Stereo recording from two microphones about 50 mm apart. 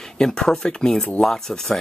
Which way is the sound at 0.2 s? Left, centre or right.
Centre.